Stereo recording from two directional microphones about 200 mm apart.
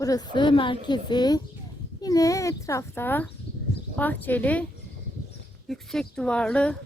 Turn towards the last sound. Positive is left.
turn(degrees=5)  # may be behind; listen again after turning